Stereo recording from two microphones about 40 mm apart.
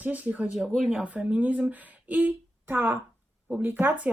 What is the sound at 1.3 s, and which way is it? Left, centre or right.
Speech, right.